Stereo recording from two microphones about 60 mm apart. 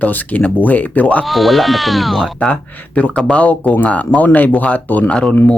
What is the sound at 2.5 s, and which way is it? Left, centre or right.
Speech, left.